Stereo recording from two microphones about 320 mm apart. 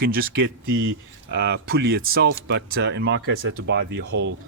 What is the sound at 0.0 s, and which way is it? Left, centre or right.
Speech, right.